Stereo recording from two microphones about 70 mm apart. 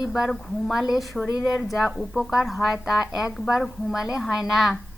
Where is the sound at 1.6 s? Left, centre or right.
Centre.